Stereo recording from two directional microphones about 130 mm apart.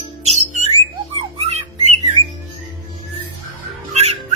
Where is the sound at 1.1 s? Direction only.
50° right (ahead or behind).